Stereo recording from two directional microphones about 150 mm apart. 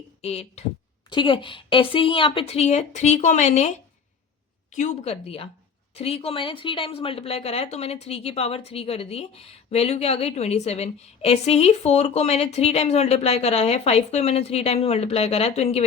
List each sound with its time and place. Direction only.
0.2 s speech: 45° left (ahead or behind)
1.1 s speech: 30° left (ahead or behind); by 3.7 s 50° left (ahead or behind)
4.7 s speech: 55° left (ahead or behind)